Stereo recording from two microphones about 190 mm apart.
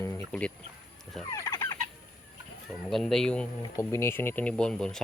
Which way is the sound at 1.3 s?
15° left (ahead or behind).